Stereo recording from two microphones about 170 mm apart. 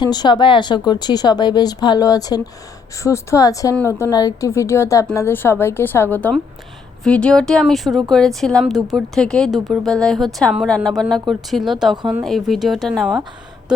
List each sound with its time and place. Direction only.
0.0 s a woman's voice: 25° left (ahead or behind); by 13.1 s centre (ahead or behind)